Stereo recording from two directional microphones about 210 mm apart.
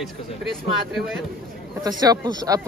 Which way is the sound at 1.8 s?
20° right (ahead or behind).